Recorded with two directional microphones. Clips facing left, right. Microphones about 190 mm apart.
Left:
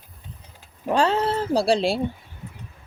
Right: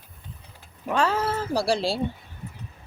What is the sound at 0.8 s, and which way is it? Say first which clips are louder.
Speech: left 3 dB; 30° left (ahead or behind).